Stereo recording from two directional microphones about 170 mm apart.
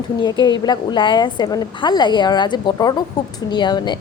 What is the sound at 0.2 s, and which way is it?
A woman's voice, 25° left (ahead or behind).